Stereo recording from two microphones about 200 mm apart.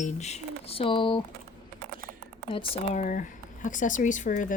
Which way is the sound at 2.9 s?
40° left (ahead or behind).